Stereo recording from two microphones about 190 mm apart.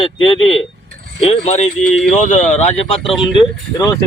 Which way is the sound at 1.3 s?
35° left (ahead or behind).